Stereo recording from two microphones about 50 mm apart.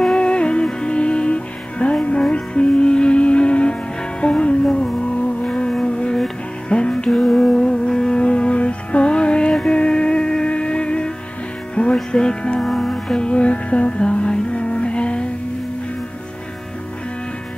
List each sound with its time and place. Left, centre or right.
0.0 s music: centre